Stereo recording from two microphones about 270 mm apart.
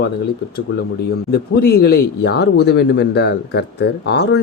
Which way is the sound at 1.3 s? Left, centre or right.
Left.